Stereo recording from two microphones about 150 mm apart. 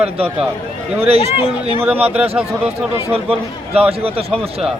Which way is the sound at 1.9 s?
10° right (ahead or behind).